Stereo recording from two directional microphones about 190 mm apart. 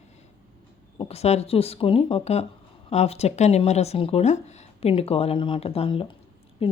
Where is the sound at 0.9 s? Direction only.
35° left (ahead or behind).